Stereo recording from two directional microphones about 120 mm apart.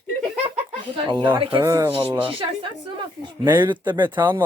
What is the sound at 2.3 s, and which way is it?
A woman's voice, 45° right (ahead or behind).